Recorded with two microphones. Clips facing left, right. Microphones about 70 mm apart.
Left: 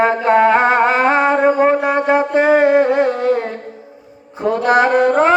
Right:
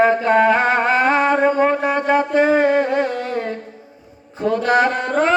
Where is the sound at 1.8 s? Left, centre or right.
Centre.